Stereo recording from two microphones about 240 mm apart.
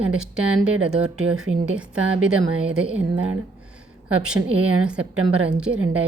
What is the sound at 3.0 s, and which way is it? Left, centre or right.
Speech, right.